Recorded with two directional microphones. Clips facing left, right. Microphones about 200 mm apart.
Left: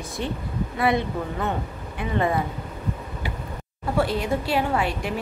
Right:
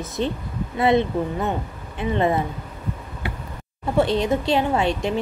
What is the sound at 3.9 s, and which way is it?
Speech, 25° right (ahead or behind).